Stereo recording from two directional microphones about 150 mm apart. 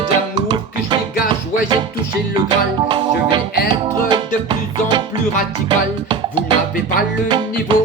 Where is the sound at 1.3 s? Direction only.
30° right (ahead or behind).